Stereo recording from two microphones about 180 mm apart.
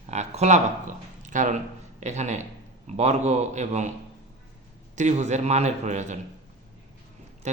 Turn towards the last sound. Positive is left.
turn(degrees=-40)  # may be behind; listen again after turning